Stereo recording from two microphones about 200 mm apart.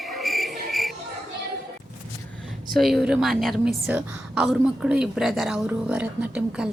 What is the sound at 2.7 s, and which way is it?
A woman's voice, centre (ahead or behind).